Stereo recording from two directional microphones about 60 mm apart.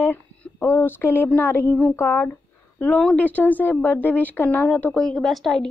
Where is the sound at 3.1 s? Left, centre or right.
Left.